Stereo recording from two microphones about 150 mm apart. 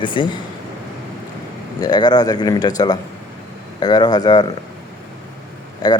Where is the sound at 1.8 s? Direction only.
30° left (ahead or behind).